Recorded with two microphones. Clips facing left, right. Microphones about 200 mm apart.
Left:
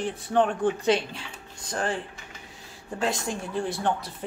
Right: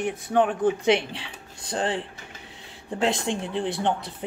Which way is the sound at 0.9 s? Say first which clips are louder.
Right 2 dB; 25° right (ahead or behind).